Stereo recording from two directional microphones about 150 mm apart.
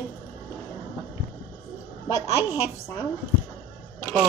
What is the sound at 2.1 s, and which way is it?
Speech, 20° left (ahead or behind).